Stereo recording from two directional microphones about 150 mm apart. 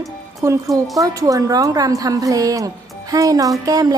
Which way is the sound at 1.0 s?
25° right (ahead or behind).